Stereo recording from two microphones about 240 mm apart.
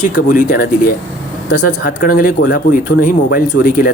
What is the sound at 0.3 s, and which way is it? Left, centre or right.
Speech, left.